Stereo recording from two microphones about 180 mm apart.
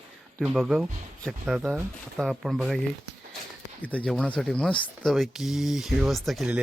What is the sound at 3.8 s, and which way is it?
Speech, 5° left (ahead or behind).